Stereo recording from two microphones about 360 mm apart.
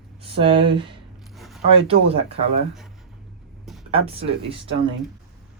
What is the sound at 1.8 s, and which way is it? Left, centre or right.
Speech, centre.